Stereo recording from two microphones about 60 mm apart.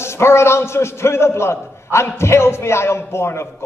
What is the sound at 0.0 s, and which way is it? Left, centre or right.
A man's voice, left.